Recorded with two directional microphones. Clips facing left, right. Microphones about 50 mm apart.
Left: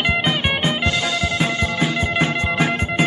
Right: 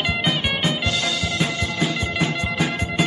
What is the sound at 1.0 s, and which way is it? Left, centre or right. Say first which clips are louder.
Music: left 3 dB; centre.